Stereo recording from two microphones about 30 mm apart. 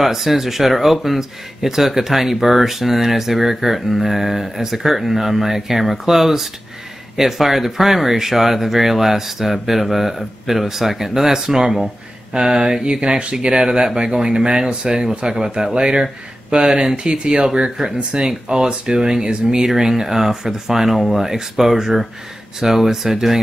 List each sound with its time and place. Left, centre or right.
0.0 s speech: centre
12.3 s speech: right